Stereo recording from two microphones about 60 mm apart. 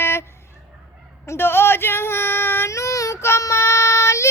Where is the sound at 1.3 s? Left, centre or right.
Left.